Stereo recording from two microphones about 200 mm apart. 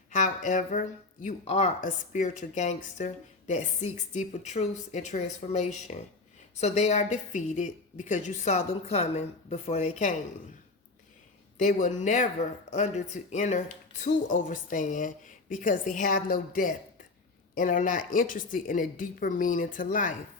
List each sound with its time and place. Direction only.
0.1 s speech: 40° left (ahead or behind)
11.5 s a woman's voice: 40° left (ahead or behind)